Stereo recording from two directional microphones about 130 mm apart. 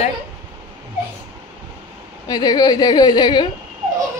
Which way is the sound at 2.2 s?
30° left (ahead or behind).